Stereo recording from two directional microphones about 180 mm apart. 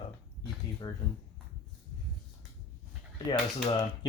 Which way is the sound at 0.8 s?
25° left (ahead or behind).